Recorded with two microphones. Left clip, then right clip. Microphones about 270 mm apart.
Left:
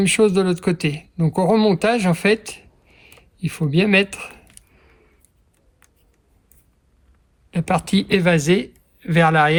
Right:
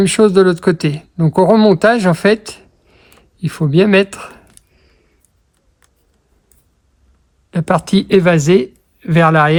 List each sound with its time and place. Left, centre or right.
0.0 s speech: right
4.5 s a sound: centre
7.5 s speech: right